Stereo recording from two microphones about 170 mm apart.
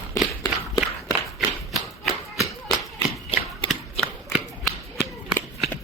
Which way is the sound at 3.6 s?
Centre (ahead or behind).